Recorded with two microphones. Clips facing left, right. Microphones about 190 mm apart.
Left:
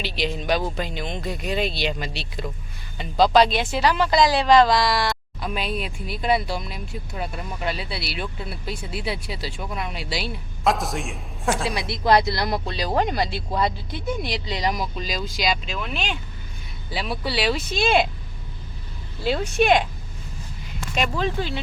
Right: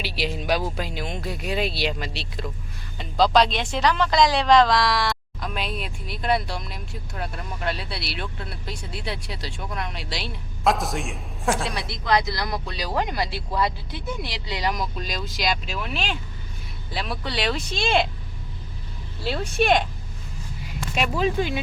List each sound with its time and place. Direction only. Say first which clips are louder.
0.0 s speech: left 1 dB; 5° right (ahead or behind)
12.0 s speech: left 4 dB; 30° left (ahead or behind)
14.8 s speech: left 2 dB; centre (ahead or behind)
19.2 s speech: left 3 dB; centre (ahead or behind)
20.9 s speech: right 1 dB; 5° right (ahead or behind)